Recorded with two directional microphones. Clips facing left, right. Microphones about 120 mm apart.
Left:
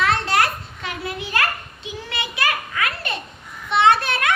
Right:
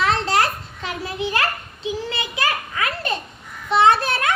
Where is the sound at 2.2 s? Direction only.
35° right (ahead or behind).